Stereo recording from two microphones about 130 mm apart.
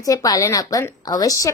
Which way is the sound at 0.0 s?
30° left (ahead or behind).